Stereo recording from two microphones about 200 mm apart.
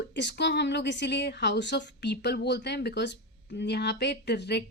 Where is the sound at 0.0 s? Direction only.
60° left (ahead or behind).